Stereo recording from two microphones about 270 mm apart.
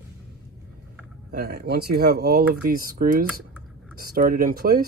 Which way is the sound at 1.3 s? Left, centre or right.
Right.